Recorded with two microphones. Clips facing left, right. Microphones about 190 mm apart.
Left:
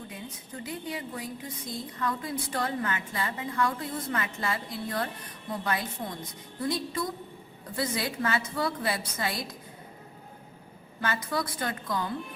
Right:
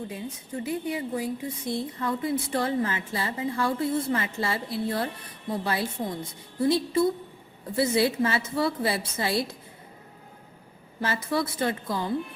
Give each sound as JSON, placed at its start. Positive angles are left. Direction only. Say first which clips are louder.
{"t": 0.1, "sound": "a woman's voice", "louder": "right 6 dB", "side_deg": -25}
{"t": 11.0, "sound": "a woman's voice", "louder": "right 4 dB", "side_deg": -25}